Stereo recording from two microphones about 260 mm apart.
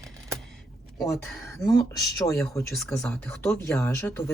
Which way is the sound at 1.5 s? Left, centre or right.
Centre.